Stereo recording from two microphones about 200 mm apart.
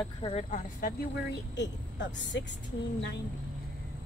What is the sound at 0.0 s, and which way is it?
Speech, 30° left (ahead or behind).